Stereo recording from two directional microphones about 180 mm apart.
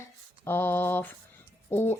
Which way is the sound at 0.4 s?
10° left (ahead or behind).